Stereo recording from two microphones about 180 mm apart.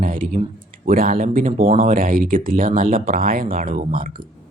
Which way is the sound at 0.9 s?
50° right (ahead or behind).